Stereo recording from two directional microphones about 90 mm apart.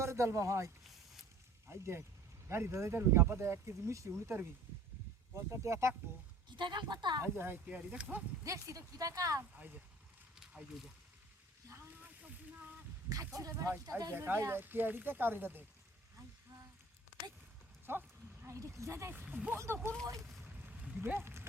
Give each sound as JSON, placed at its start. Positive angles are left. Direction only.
{"t": 0.0, "sound": "speech", "side_deg": -30}
{"t": 6.6, "sound": "a woman's voice", "side_deg": -60}
{"t": 7.2, "sound": "speech", "side_deg": -25}
{"t": 8.4, "sound": "speech", "side_deg": -35}
{"t": 10.4, "sound": "speech", "side_deg": -5}
{"t": 11.7, "sound": "a sound", "side_deg": -20}
{"t": 13.1, "sound": "speech", "side_deg": -40}
{"t": 14.1, "sound": "speech", "side_deg": -25}
{"t": 17.9, "sound": "speech", "side_deg": -25}
{"t": 18.4, "sound": "speech", "side_deg": -35}
{"t": 19.1, "sound": "speech", "side_deg": -15}
{"t": 20.7, "sound": "a sound", "side_deg": -20}